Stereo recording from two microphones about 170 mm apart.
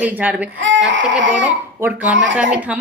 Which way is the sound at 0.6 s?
90° right.